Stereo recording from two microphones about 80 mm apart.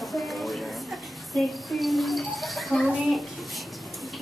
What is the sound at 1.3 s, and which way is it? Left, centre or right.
Speech, centre.